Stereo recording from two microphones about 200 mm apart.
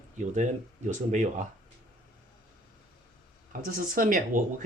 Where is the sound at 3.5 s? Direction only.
45° right (ahead or behind).